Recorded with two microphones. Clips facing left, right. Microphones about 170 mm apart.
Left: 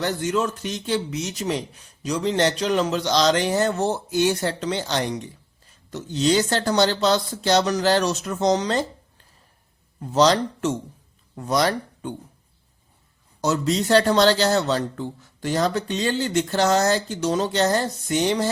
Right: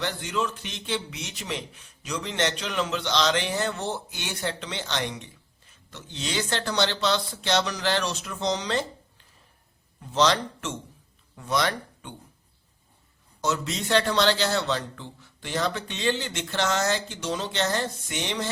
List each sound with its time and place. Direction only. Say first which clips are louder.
0.0 s a man's voice: left 6 dB; 45° left (ahead or behind)
10.0 s a man's voice: left 5 dB; 40° left (ahead or behind)
13.4 s a man's voice: left 6 dB; 35° left (ahead or behind)